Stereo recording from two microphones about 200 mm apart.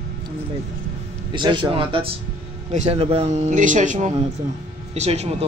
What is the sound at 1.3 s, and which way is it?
Speech, 25° right (ahead or behind).